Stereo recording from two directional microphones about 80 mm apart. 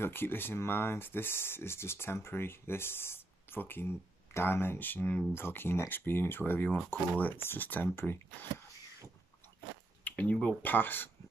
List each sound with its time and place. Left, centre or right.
0.0 s speech: left
10.0 s a sound: centre
10.6 s speech: left